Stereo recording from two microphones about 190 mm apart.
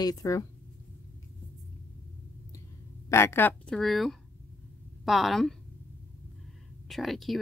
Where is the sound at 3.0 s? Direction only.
15° left (ahead or behind).